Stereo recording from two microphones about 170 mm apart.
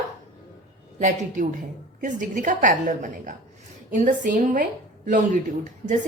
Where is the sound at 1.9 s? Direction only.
50° right (ahead or behind).